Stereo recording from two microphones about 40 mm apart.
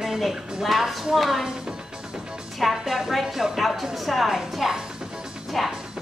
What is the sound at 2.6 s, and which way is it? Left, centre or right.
A woman's voice, centre.